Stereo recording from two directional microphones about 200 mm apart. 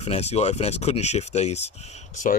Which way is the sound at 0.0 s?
30° left (ahead or behind).